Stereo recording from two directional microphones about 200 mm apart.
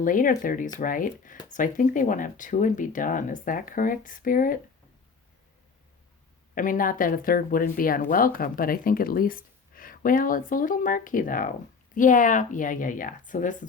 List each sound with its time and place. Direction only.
0.0 s speech: 40° left (ahead or behind)
6.5 s speech: 45° left (ahead or behind)